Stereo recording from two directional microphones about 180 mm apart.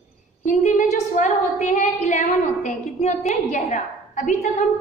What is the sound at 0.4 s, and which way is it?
A woman's voice, 40° left (ahead or behind).